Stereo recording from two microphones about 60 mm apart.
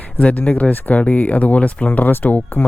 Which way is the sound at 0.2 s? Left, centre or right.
Left.